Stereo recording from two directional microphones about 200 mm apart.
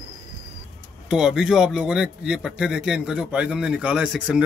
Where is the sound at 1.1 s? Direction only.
Centre (ahead or behind).